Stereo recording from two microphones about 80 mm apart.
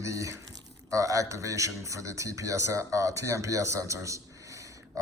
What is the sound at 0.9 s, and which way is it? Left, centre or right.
Speech, right.